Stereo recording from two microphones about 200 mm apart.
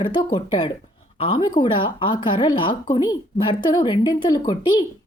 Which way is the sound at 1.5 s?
25° left (ahead or behind).